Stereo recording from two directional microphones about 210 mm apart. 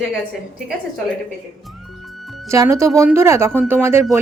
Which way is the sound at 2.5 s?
15° right (ahead or behind).